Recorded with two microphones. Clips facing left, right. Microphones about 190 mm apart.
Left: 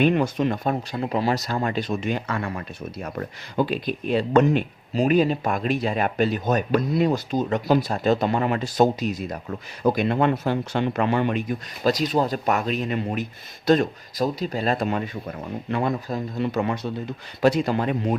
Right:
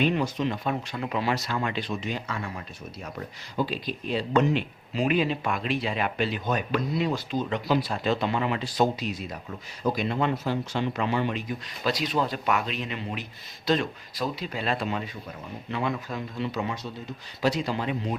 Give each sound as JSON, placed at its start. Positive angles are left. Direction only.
{"t": 0.0, "sound": "speech", "side_deg": 55}
{"t": 9.8, "sound": "speech", "side_deg": 55}